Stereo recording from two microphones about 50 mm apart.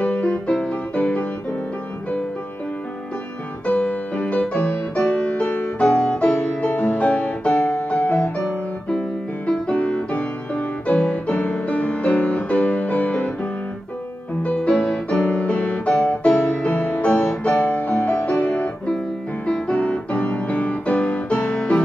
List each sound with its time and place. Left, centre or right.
0.0 s music: left
3.6 s music: left
6.1 s music: left
9.5 s music: left
14.4 s music: left
14.8 s music: centre
15.2 s music: left
19.4 s music: left